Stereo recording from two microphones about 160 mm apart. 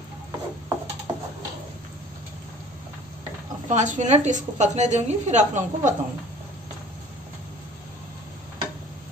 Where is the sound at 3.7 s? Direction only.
50° right (ahead or behind).